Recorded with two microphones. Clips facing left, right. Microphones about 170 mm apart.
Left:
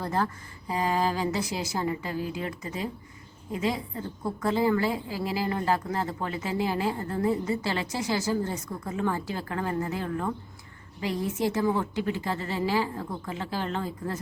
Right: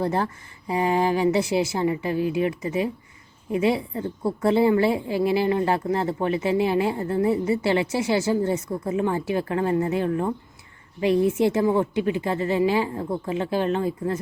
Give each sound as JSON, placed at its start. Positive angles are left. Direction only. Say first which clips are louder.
{"t": 0.0, "sound": "speech", "louder": "right 4 dB", "side_deg": -20}
{"t": 4.2, "sound": "speech", "louder": "right 6 dB", "side_deg": -25}